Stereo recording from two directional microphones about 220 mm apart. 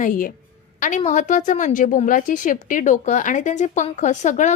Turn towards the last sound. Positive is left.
turn(degrees=35)  # may be behind; listen again after turning